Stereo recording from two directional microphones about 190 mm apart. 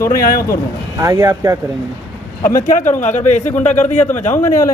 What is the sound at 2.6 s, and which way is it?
Speech, 40° left (ahead or behind).